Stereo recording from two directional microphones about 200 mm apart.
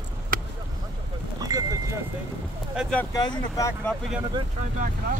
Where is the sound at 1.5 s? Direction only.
15° right (ahead or behind).